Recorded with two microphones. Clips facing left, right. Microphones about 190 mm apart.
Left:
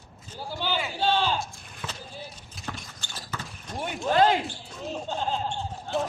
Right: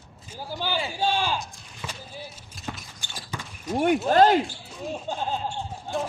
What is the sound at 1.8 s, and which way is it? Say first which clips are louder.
Basketball bounce: right 1 dB; 10° right (ahead or behind).